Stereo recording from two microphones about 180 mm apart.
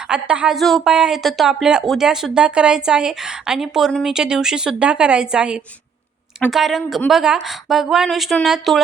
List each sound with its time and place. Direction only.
0.1 s a woman's voice: 5° right (ahead or behind)